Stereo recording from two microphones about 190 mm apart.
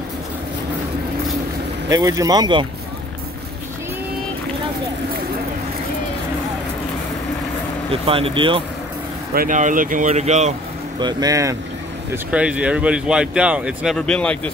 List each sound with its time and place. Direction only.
1.9 s speech: 20° right (ahead or behind)
7.9 s speech: 30° right (ahead or behind)
9.3 s speech: 45° right (ahead or behind)
11.0 s speech: 20° right (ahead or behind)
12.1 s speech: 5° right (ahead or behind)